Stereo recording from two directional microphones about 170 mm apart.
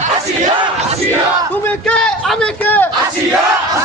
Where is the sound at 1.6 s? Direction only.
5° left (ahead or behind).